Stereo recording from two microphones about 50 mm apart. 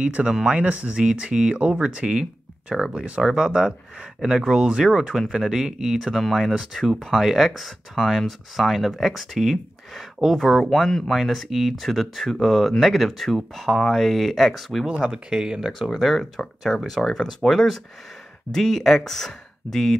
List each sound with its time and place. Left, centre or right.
0.0 s speech: right
0.3 s speech: centre
0.6 s speech: right; by 14.9 s centre
14.9 s speech: centre
15.6 s speech: centre